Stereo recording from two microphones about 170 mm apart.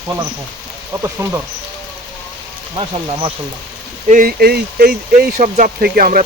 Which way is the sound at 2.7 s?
30° right (ahead or behind).